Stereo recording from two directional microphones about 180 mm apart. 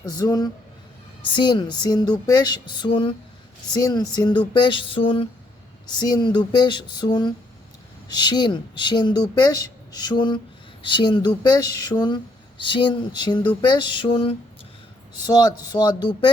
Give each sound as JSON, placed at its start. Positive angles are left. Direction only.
{"t": 0.0, "sound": "speech", "side_deg": 20}
{"t": 15.1, "sound": "speech", "side_deg": 20}